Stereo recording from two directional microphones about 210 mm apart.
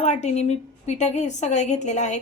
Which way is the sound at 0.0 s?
35° left (ahead or behind).